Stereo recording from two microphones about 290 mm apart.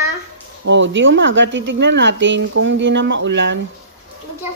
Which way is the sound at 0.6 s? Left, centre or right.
Right.